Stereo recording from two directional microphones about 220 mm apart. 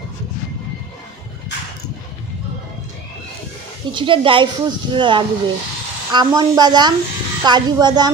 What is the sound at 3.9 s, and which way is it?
A man's voice, 20° right (ahead or behind).